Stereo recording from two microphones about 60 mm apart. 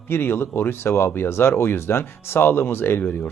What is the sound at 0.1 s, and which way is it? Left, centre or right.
Speech, left.